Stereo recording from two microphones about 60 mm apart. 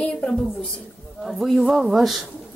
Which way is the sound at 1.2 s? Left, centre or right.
Centre.